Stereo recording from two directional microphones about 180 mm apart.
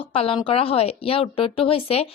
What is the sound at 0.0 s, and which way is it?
A woman's voice, 30° left (ahead or behind).